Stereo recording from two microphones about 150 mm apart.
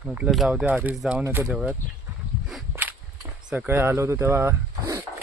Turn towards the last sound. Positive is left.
turn(degrees=-20)  # may be behind; listen again after turning